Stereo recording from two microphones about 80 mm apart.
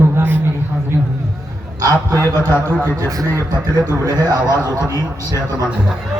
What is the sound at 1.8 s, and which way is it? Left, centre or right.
Speech, right.